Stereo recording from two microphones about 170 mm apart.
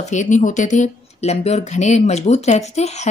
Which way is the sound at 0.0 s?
45° left (ahead or behind).